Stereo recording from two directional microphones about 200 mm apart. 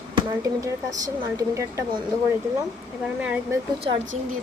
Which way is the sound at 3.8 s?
30° right (ahead or behind).